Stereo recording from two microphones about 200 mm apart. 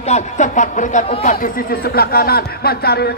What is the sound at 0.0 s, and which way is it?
Speech, 35° left (ahead or behind).